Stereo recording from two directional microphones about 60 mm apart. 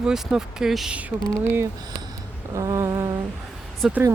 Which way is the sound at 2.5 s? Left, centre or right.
Right.